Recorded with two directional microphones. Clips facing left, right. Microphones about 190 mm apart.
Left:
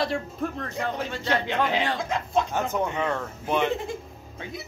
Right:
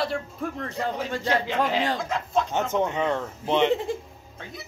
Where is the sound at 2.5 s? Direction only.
20° right (ahead or behind).